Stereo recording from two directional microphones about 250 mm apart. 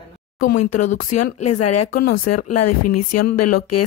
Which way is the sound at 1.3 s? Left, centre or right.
Left.